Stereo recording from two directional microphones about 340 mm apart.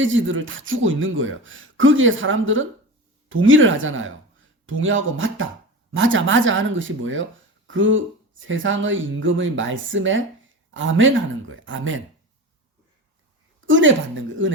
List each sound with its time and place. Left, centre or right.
0.0 s a woman's voice: right
13.7 s a woman's voice: right